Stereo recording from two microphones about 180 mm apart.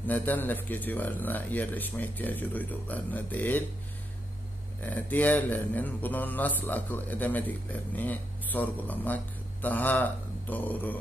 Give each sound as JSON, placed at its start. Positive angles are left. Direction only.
{"t": 0.0, "sound": "speech", "side_deg": 10}
{"t": 4.8, "sound": "speech", "side_deg": 10}